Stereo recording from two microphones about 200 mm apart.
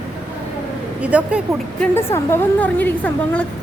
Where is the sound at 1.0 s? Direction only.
5° right (ahead or behind).